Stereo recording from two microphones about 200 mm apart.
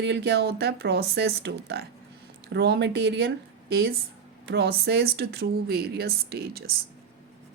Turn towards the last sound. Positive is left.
turn(degrees=-50)  # may be behind; listen again after turning